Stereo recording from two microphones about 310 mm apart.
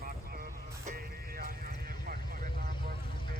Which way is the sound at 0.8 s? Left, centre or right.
Right.